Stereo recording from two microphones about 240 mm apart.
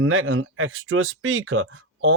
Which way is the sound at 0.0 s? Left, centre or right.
Right.